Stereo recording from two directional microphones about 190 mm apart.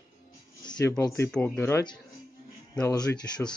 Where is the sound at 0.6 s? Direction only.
20° left (ahead or behind).